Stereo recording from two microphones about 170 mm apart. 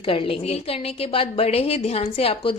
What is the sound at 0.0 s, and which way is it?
Speech, 35° left (ahead or behind).